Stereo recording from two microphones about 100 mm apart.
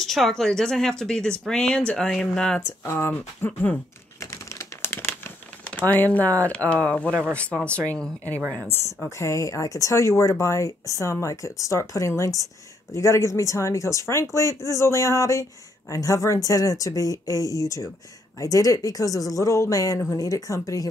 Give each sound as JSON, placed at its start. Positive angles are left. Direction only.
{"t": 0.0, "sound": "speech", "side_deg": 5}
{"t": 2.8, "sound": "speech", "side_deg": 20}
{"t": 4.2, "sound": "typing", "side_deg": 30}
{"t": 5.7, "sound": "speech", "side_deg": 15}